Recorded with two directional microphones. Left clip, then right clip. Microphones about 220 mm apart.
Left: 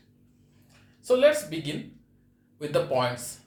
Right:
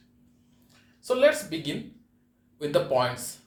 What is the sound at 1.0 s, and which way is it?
Speech, 20° right (ahead or behind).